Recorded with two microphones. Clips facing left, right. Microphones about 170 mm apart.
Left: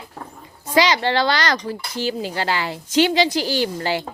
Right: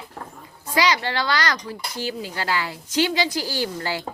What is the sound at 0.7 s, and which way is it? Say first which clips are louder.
Speech: left 4 dB; 25° left (ahead or behind).